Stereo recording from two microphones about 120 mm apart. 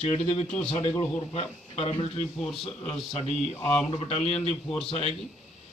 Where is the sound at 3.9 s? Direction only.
55° left (ahead or behind).